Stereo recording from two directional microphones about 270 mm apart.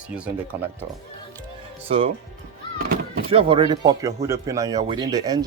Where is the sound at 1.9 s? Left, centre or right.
Right.